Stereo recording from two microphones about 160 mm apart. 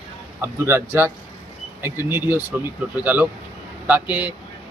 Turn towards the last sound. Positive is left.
turn(degrees=-10)  # may be behind; listen again after turning